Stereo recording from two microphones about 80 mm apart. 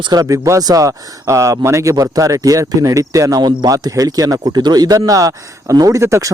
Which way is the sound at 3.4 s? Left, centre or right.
Right.